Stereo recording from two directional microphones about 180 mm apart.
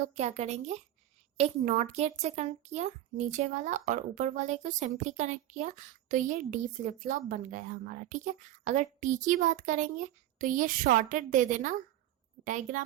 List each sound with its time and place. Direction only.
0.0 s a child's voice: 40° right (ahead or behind)